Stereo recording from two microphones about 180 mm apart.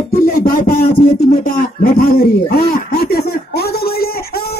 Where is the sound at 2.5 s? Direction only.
60° left (ahead or behind).